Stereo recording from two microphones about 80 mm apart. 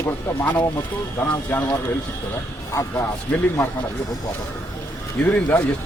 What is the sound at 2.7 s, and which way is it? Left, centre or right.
Speech, left.